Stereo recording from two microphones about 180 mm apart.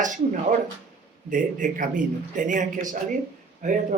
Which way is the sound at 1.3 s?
50° right (ahead or behind).